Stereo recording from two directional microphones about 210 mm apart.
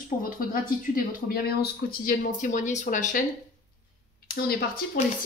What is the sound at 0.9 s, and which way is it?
Speech, 45° left (ahead or behind).